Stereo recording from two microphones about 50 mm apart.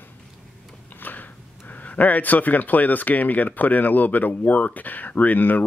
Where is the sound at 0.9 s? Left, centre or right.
Left.